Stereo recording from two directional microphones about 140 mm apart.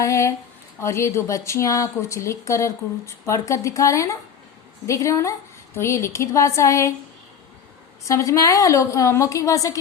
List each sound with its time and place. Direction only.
0.0 s speech: 20° left (ahead or behind)
8.0 s speech: 20° left (ahead or behind)